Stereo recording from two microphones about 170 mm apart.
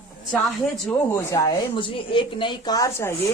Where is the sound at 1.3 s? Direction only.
25° left (ahead or behind).